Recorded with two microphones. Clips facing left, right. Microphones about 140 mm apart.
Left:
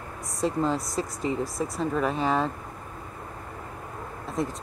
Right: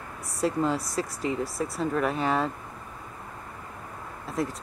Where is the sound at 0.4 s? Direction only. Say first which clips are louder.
Even; centre (ahead or behind).